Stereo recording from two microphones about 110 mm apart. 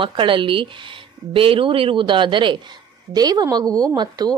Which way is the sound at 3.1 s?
35° right (ahead or behind).